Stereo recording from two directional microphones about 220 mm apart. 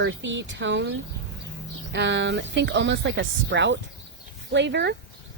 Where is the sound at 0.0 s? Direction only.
55° right (ahead or behind).